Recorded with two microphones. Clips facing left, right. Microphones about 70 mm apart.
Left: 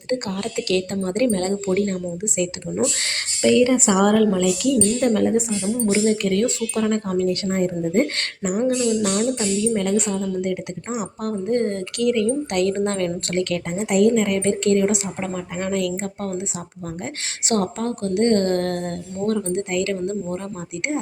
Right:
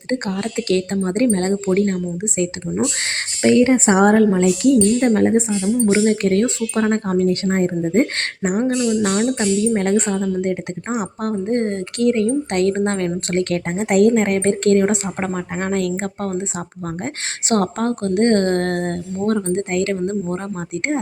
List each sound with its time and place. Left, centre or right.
0.1 s a woman's voice: right
8.8 s speech: right
9.1 s a woman's voice: right
17.5 s a woman's voice: right